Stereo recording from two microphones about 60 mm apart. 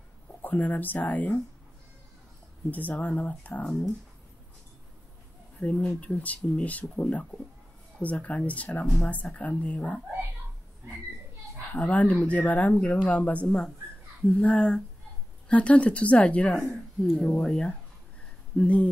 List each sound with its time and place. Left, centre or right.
0.4 s speech: left
2.7 s speech: left
5.6 s speech: centre
11.7 s speech: left
16.6 s speech: centre
17.3 s speech: centre